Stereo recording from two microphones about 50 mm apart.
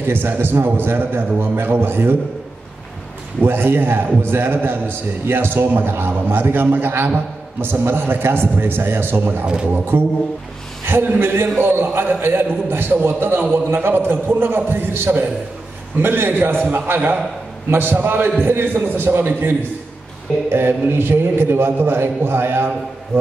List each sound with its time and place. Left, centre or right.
0.0 s a man's voice: right
3.4 s a man's voice: right
9.9 s a man's voice: right
20.5 s a man's voice: right